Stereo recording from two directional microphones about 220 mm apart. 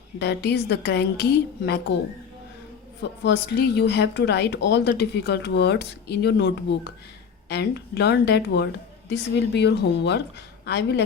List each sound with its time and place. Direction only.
0.2 s speech: 50° left (ahead or behind)
3.0 s speech: 50° left (ahead or behind)